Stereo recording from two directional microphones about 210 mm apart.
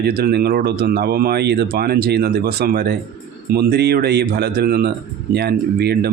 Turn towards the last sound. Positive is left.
turn(degrees=-50)  # may be behind; listen again after turning